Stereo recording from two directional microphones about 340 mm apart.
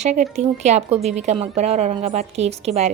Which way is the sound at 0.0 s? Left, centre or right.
Right.